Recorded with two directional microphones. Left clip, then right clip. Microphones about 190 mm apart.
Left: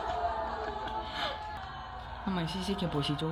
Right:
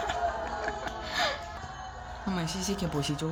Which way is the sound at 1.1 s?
20° right (ahead or behind).